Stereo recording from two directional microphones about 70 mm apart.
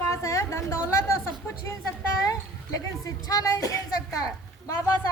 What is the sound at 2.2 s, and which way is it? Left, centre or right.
A child's voice, left.